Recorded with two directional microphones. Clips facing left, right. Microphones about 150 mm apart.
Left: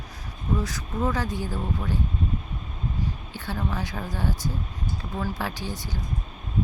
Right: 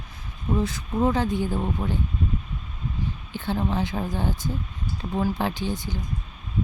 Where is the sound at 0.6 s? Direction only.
25° right (ahead or behind).